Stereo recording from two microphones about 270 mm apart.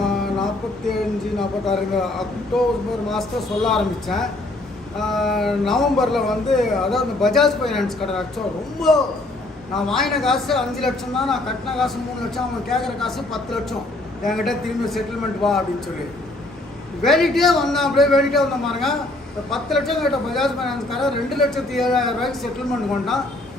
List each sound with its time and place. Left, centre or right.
0.0 s music: centre
1.4 s speech: centre
9.7 s speech: centre
17.0 s speech: centre